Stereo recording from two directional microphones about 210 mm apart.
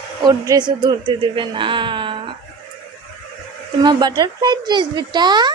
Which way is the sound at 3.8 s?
20° right (ahead or behind).